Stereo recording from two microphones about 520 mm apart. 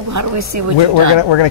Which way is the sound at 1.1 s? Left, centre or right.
Left.